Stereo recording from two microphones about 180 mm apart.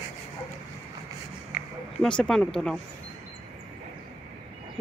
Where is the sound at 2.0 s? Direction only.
5° left (ahead or behind).